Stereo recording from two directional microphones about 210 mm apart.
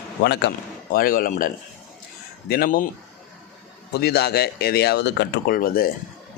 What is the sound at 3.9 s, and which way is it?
Speech, 50° left (ahead or behind).